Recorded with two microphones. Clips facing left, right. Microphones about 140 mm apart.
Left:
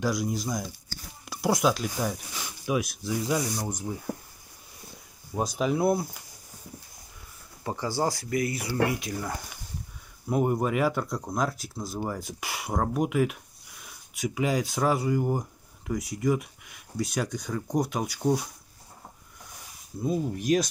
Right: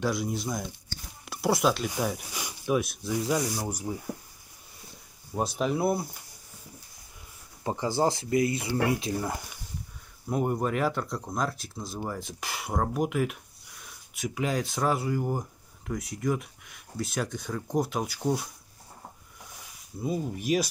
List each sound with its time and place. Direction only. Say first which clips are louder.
0.0 s speech: left 1 dB; centre (ahead or behind)
5.6 s speech: left 3 dB; centre (ahead or behind)
7.6 s speech: right 2 dB; 20° right (ahead or behind)
10.3 s speech: left 2 dB; 5° left (ahead or behind)
20.0 s speech: left 3 dB; 5° right (ahead or behind)